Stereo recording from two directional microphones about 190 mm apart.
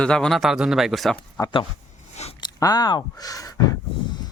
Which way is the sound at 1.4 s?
25° left (ahead or behind).